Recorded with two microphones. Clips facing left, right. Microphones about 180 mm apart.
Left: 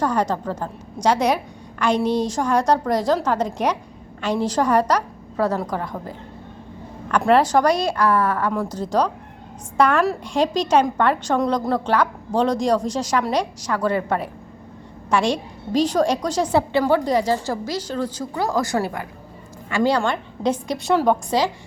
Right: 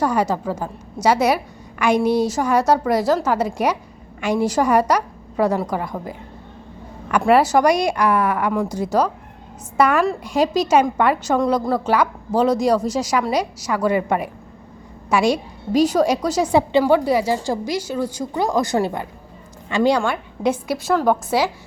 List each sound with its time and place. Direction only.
0.0 s a woman's voice: 10° right (ahead or behind)